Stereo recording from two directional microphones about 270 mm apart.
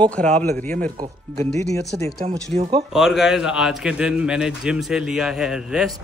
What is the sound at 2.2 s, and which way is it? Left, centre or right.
Speech, right.